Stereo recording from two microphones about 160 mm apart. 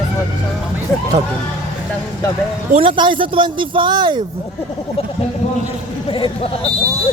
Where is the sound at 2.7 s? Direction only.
35° right (ahead or behind).